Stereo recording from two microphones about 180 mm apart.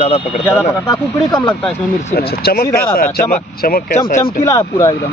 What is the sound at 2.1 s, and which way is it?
Speech, 55° left (ahead or behind).